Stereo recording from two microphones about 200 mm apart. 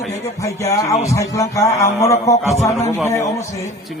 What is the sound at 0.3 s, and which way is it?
A man's voice, 15° left (ahead or behind).